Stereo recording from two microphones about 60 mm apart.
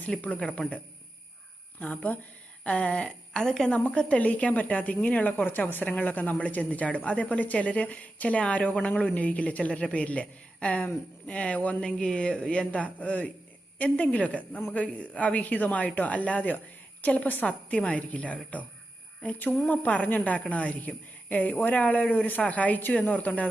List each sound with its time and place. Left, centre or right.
0.1 s a woman's voice: centre
1.8 s a woman's voice: left
3.8 s a woman's voice: left